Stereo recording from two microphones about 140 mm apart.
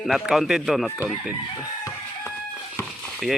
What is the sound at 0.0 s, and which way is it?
Speech, centre (ahead or behind).